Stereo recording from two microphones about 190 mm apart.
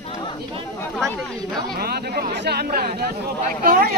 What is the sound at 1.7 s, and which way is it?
A man's voice, 55° right (ahead or behind).